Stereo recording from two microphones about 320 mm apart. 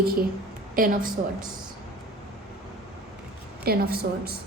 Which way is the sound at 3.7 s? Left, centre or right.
Right.